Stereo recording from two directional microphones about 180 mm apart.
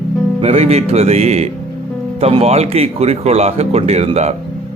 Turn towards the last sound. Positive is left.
turn(degrees=-35)  # may be behind; listen again after turning